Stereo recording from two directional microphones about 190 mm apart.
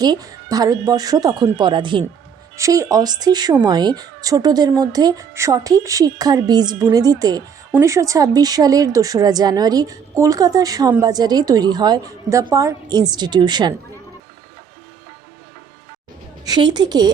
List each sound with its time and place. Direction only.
0.0 s speech: 20° right (ahead or behind)
16.5 s speech: 25° right (ahead or behind)